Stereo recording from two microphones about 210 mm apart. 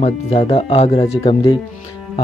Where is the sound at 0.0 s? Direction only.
25° left (ahead or behind).